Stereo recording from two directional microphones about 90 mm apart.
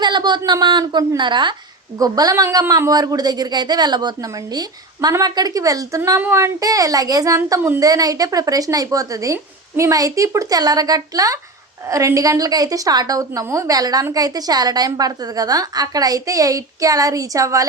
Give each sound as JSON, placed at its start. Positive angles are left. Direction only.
{"t": 0.0, "sound": "a woman's voice", "side_deg": -55}
{"t": 2.0, "sound": "a woman's voice", "side_deg": -45}
{"t": 6.1, "sound": "speech", "side_deg": -30}
{"t": 7.8, "sound": "a woman's voice", "side_deg": -45}